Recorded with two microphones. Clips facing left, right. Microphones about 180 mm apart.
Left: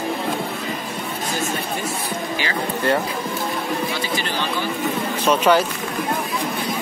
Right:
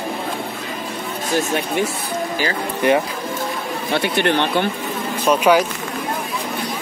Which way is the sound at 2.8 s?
20° right (ahead or behind).